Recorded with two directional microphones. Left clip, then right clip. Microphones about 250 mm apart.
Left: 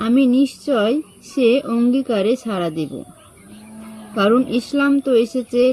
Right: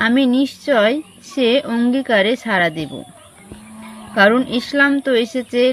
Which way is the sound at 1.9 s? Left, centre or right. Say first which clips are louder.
Right 3 dB; centre.